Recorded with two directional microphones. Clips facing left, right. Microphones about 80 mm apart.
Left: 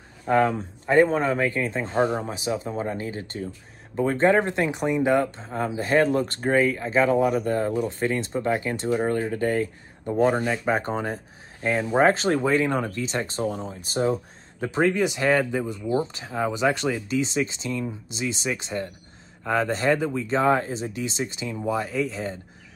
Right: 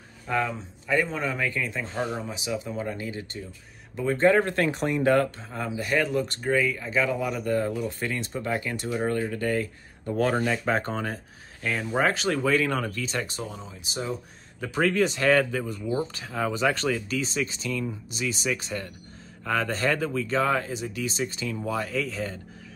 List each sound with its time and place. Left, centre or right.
0.3 s a man's voice: left
4.6 s speech: centre
5.4 s speech: left